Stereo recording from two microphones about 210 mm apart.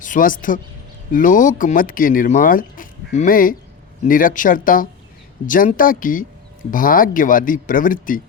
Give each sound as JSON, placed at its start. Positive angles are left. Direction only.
{"t": 0.0, "sound": "speech", "side_deg": 40}